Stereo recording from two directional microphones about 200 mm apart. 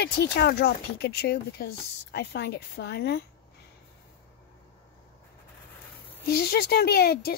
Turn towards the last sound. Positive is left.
turn(degrees=50)  # may be behind; listen again after turning